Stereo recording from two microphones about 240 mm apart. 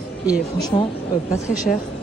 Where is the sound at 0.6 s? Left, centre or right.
Centre.